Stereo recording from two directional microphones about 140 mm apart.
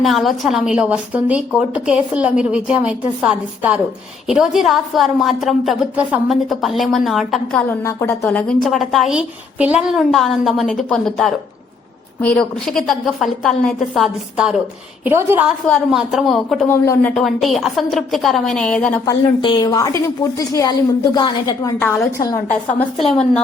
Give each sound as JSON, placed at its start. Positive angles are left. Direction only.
{"t": 0.0, "sound": "a woman's voice", "side_deg": 0}
{"t": 7.9, "sound": "a woman's voice", "side_deg": 20}
{"t": 8.3, "sound": "a woman's voice", "side_deg": 5}
{"t": 15.0, "sound": "a woman's voice", "side_deg": -15}
{"t": 15.9, "sound": "a woman's voice", "side_deg": -5}
{"t": 16.6, "sound": "a woman's voice", "side_deg": 20}
{"t": 17.2, "sound": "a woman's voice", "side_deg": 0}
{"t": 19.0, "sound": "a woman's voice", "side_deg": 30}
{"t": 21.8, "sound": "a woman's voice", "side_deg": 15}